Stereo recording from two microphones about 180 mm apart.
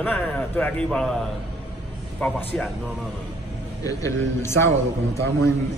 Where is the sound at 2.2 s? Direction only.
5° left (ahead or behind).